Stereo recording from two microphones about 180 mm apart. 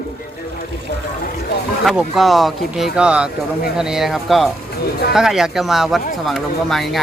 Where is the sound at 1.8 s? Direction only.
Centre (ahead or behind).